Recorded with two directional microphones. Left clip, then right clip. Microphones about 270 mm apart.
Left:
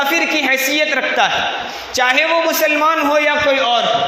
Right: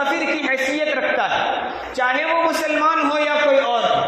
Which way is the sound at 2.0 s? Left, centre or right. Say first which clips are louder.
Left 6 dB; left.